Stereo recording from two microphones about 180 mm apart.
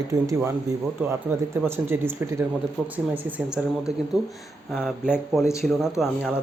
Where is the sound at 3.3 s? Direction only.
5° right (ahead or behind).